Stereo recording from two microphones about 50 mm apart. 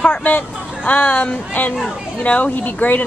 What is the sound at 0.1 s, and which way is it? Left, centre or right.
A woman's voice, left.